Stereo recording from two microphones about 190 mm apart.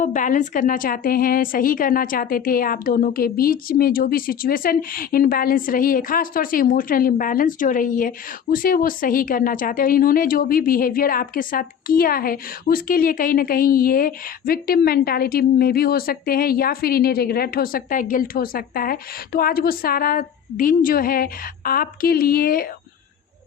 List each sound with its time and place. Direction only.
0.0 s speech: 40° left (ahead or behind)